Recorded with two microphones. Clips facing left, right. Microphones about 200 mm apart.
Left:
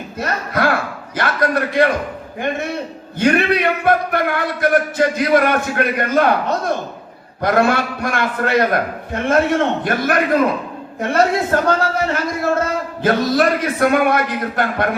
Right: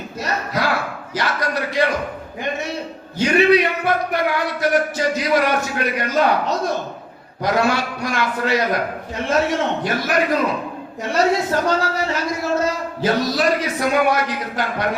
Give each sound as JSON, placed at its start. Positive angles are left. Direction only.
{"t": 0.2, "sound": "a sound", "side_deg": 55}
{"t": 1.1, "sound": "a man's voice", "side_deg": 55}
{"t": 3.2, "sound": "speech", "side_deg": 55}